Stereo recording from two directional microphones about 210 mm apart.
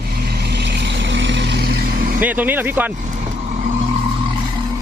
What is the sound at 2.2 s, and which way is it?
Speech, 10° right (ahead or behind).